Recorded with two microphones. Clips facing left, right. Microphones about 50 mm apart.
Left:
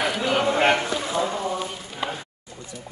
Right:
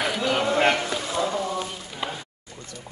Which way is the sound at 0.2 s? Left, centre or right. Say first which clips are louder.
Even; centre.